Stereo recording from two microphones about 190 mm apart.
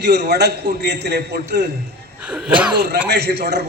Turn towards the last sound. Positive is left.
turn(degrees=-60)  # may be behind; listen again after turning